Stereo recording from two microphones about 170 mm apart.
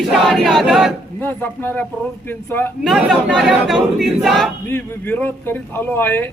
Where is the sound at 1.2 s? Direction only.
10° left (ahead or behind).